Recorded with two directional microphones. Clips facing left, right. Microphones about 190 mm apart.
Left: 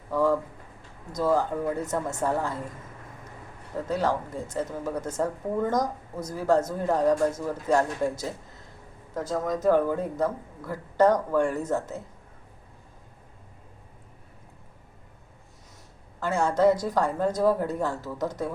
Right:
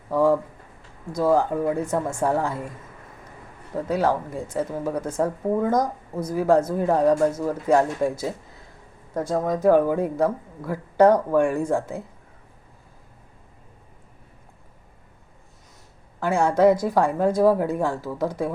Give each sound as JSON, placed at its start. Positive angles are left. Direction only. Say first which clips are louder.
{"t": 0.1, "sound": "a sound", "louder": "right 4 dB", "side_deg": -10}
{"t": 1.1, "sound": "speech", "louder": "right 4 dB", "side_deg": -10}
{"t": 3.8, "sound": "speech", "louder": "right 4 dB", "side_deg": -10}
{"t": 16.2, "sound": "speech", "louder": "right 4 dB", "side_deg": -10}